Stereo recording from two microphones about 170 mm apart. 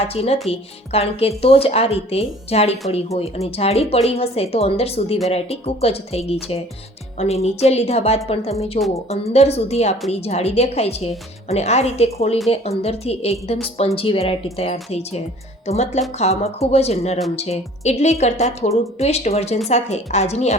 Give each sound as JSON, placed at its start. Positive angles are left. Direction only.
{"t": 0.1, "sound": "speech", "side_deg": 35}